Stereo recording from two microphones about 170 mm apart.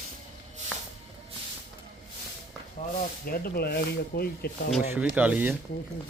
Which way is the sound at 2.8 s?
50° left (ahead or behind).